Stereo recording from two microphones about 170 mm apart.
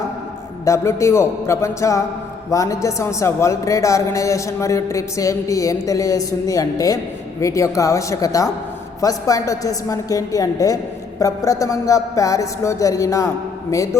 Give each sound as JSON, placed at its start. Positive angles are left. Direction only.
{"t": 0.6, "sound": "a man's voice", "side_deg": 15}